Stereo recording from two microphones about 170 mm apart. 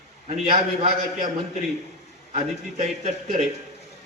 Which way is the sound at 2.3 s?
40° right (ahead or behind).